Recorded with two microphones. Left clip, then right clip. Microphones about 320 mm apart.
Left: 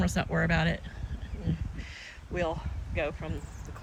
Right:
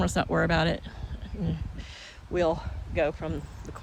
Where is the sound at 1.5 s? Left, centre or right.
Centre.